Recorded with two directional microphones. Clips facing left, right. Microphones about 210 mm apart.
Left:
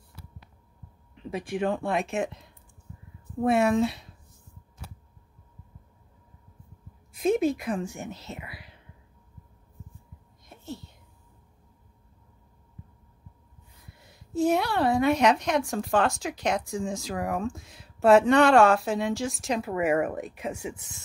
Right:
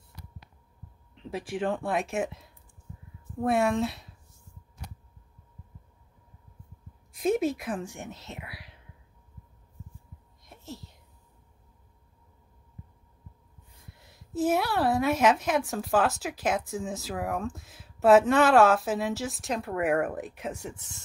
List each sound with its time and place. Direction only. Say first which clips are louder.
1.1 s a woman's voice: left 2 dB; centre (ahead or behind)
7.2 s speech: left 2 dB; centre (ahead or behind)
10.4 s a sound: left 4 dB; centre (ahead or behind)
13.9 s a woman's voice: left 3 dB; centre (ahead or behind)